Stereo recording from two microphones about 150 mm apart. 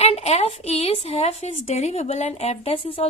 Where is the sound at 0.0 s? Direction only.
45° left (ahead or behind).